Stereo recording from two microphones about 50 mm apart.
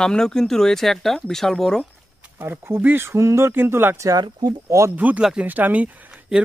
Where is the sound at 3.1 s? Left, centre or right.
Right.